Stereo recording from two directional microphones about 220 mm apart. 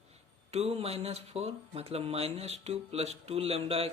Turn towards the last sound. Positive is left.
turn(degrees=-25)  # may be behind; listen again after turning